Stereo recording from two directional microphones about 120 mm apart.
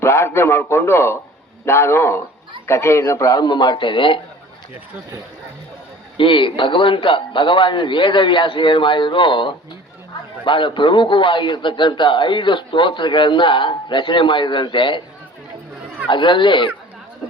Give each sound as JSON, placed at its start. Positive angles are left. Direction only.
{"t": 0.0, "sound": "a man's voice", "side_deg": 20}
{"t": 6.1, "sound": "a man's voice", "side_deg": 45}
{"t": 16.0, "sound": "a man's voice", "side_deg": 45}